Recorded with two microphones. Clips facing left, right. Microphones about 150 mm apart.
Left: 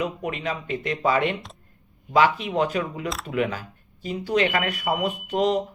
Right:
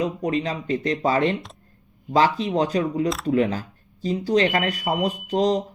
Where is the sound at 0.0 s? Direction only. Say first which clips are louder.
Right 4 dB; 35° right (ahead or behind).